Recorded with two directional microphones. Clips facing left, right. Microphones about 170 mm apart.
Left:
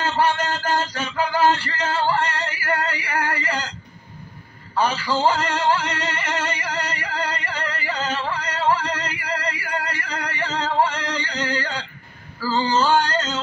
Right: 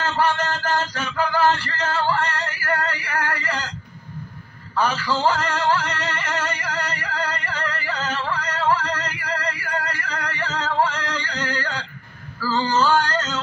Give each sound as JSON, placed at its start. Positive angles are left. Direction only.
{"t": 0.0, "sound": "music", "side_deg": 15}
{"t": 1.0, "sound": "male singing", "side_deg": 20}
{"t": 4.7, "sound": "speech", "side_deg": 15}
{"t": 6.3, "sound": "music", "side_deg": 15}
{"t": 10.9, "sound": "a sound", "side_deg": 15}